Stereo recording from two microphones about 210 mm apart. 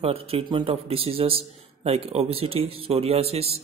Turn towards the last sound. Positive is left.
turn(degrees=-30)  # may be behind; listen again after turning